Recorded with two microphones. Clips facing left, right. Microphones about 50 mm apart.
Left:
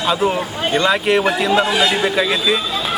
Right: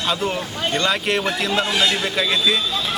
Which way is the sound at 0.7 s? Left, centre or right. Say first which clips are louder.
Left 5 dB; centre.